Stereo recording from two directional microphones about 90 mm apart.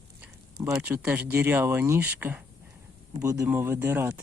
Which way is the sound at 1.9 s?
20° right (ahead or behind).